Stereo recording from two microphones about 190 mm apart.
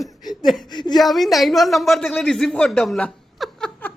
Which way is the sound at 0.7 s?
25° left (ahead or behind).